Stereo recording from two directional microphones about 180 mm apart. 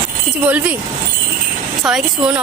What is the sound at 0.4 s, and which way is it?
Speech, 10° right (ahead or behind).